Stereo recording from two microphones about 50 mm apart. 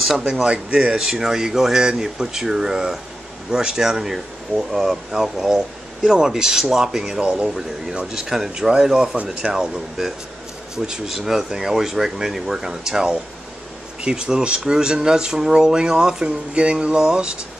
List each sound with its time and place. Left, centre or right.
0.3 s speech: centre
9.1 s speech: right
9.5 s speech: centre
16.5 s speech: right